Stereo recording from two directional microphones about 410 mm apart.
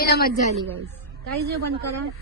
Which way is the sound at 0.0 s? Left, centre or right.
Left.